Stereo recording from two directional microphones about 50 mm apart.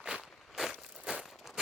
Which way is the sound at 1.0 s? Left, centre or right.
Centre.